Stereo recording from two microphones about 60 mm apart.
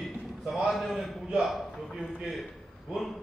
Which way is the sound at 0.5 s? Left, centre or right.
Centre.